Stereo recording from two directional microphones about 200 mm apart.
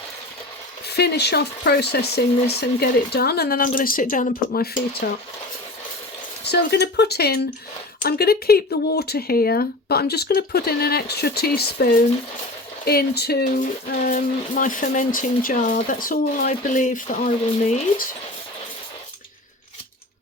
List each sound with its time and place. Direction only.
0.9 s speech: 55° left (ahead or behind)
6.4 s speech: 55° left (ahead or behind); by 18.0 s 35° left (ahead or behind)